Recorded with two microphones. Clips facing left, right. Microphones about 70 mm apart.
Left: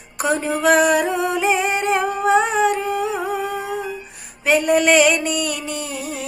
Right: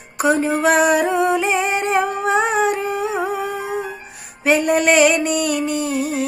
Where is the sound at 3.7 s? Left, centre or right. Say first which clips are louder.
Right 1 dB; right.